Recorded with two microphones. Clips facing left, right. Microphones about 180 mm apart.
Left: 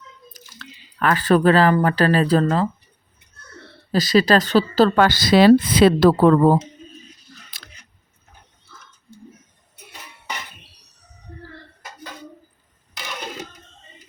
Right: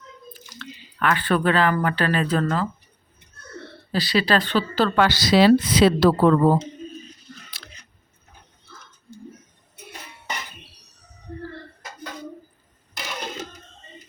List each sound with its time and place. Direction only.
0.6 s speech: 35° left (ahead or behind)
3.9 s a woman's voice: 45° left (ahead or behind)